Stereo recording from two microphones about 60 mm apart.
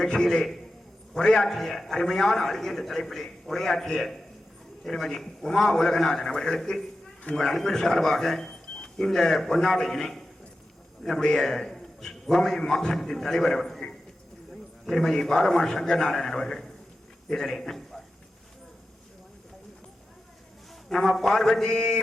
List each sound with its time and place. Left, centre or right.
0.0 s a man's voice: centre
20.9 s a man's voice: centre